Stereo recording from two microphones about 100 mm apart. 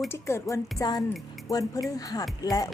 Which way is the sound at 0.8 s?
40° left (ahead or behind).